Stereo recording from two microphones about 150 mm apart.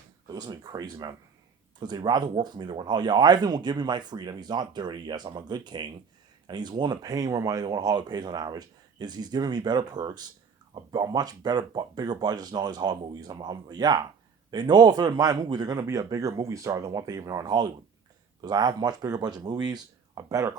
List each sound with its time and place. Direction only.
0.3 s speech: 25° right (ahead or behind)